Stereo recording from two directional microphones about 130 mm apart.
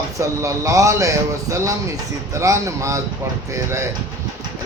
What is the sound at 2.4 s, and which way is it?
Speech, 25° right (ahead or behind).